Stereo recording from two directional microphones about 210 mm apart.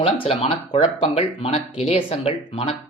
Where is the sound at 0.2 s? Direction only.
25° left (ahead or behind).